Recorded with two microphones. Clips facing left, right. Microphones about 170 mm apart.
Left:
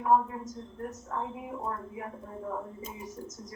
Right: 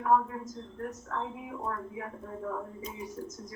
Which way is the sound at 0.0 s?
15° left (ahead or behind).